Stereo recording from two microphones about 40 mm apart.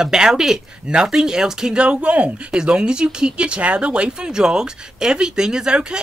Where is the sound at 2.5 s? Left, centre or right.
Centre.